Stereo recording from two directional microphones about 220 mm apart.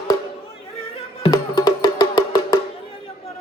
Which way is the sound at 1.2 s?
15° left (ahead or behind).